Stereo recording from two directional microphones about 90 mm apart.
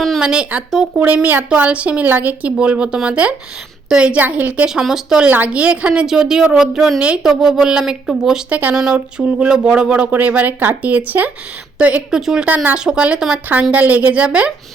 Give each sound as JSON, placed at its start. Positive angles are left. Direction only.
{"t": 0.2, "sound": "speech", "side_deg": -10}
{"t": 8.4, "sound": "speech", "side_deg": -15}